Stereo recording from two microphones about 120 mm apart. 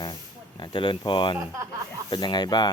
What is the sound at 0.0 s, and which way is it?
Speech, 35° left (ahead or behind).